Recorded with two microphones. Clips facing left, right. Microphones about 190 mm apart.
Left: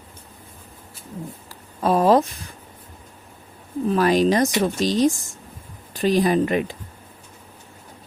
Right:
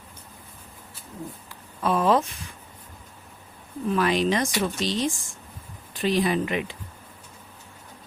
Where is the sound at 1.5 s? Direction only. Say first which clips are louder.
Left 5 dB; 40° left (ahead or behind).